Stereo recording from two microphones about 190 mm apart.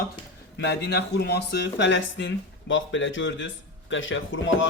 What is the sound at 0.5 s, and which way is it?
Speech, 65° left (ahead or behind).